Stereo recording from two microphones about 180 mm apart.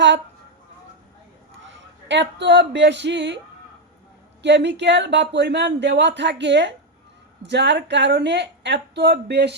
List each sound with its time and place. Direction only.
1.6 s speech: 85° right
4.4 s speech: 75° right (ahead or behind)